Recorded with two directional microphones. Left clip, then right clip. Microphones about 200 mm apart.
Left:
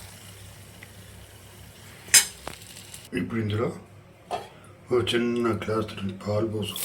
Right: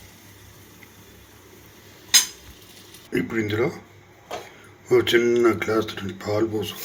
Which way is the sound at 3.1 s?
20° right (ahead or behind).